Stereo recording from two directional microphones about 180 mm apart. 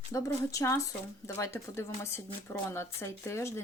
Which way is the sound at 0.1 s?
15° left (ahead or behind).